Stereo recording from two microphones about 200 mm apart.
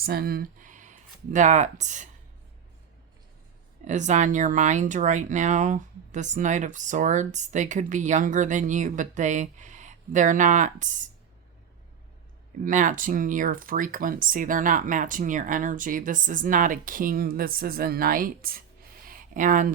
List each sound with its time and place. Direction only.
0.0 s speech: 50° right (ahead or behind)
3.8 s speech: 35° right (ahead or behind)
12.6 s speech: 40° right (ahead or behind)